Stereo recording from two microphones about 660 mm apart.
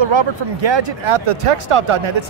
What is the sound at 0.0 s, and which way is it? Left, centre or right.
Speech, right.